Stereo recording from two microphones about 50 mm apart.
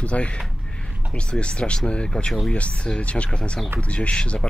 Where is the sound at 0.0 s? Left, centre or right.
Left.